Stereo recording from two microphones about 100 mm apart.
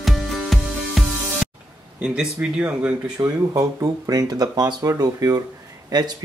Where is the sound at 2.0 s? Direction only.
10° right (ahead or behind).